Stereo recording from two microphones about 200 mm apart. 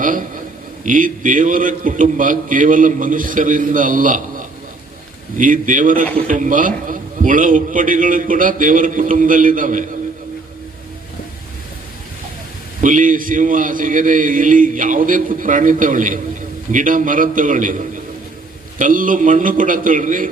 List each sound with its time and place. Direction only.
0.0 s a sound: 40° right (ahead or behind)
0.9 s a man's voice: 40° right (ahead or behind)
12.8 s a man's voice: 40° right (ahead or behind)